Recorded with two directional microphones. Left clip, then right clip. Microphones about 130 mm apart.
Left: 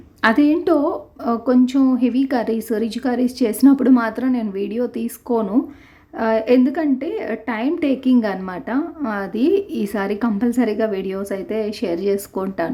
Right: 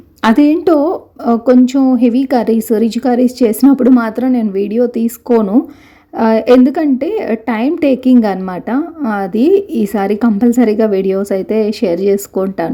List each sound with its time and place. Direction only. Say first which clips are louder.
0.2 s a woman's voice: right 5 dB; 30° right (ahead or behind)